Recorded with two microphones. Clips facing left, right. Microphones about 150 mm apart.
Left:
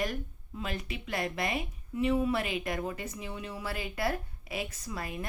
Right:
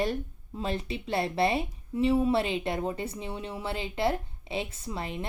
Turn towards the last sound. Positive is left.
turn(degrees=-25)  # may be behind; listen again after turning